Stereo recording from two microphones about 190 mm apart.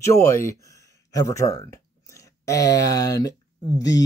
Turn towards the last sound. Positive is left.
turn(degrees=20)  # may be behind; listen again after turning